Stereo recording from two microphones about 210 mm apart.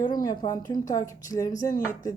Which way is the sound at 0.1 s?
20° left (ahead or behind).